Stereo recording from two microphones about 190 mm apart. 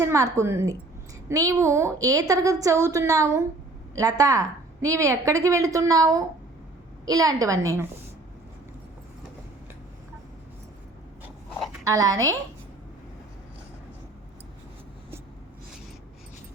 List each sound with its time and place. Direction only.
0.0 s a woman's voice: 15° right (ahead or behind)
11.9 s a woman's voice: 20° right (ahead or behind)